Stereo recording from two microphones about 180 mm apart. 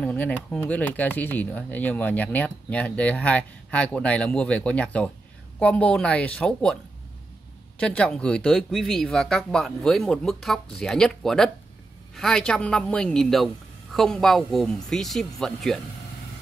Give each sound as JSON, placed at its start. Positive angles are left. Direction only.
{"t": 0.0, "sound": "speech", "side_deg": 5}
{"t": 7.8, "sound": "speech", "side_deg": 5}